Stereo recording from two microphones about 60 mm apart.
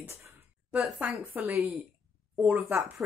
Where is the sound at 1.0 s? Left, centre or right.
Right.